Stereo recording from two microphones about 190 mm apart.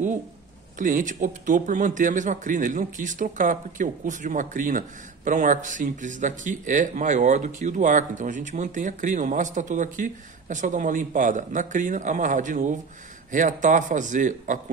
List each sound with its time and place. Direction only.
0.7 s speech: 45° right (ahead or behind)